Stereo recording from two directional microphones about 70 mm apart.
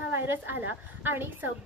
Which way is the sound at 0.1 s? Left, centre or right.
Right.